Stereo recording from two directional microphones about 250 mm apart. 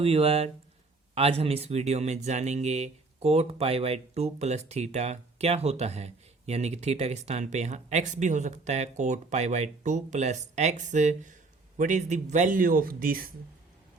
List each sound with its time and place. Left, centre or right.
0.0 s speech: right